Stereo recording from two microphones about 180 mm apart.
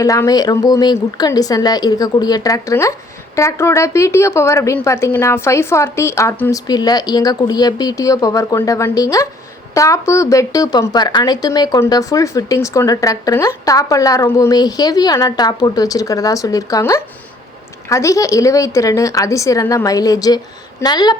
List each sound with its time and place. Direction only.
0.0 s a woman's voice: 20° left (ahead or behind)